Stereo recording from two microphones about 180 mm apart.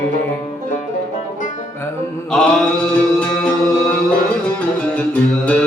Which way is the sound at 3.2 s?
5° left (ahead or behind).